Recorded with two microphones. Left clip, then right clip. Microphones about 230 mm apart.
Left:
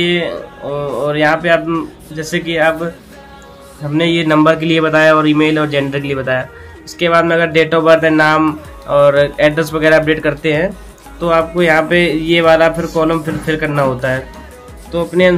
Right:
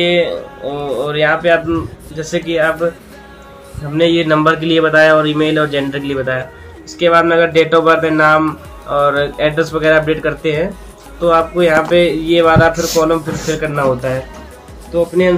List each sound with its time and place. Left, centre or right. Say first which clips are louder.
0.0 s speech: right 2 dB; left
3.9 s speech: right 1 dB; left